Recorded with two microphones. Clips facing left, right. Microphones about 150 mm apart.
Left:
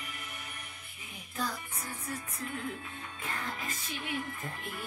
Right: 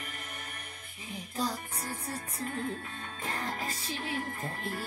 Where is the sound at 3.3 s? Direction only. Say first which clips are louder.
Right 3 dB; 35° right (ahead or behind).